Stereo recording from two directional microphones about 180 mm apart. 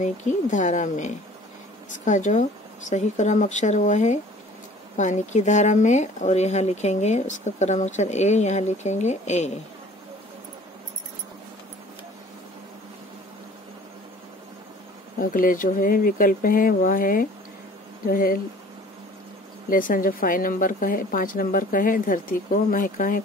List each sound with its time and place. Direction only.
0.0 s a woman's voice: 45° left (ahead or behind)
15.1 s a woman's voice: 50° left (ahead or behind)
19.7 s a woman's voice: 50° left (ahead or behind)